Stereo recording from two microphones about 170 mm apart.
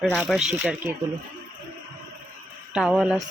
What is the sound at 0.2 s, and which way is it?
Speech, centre (ahead or behind).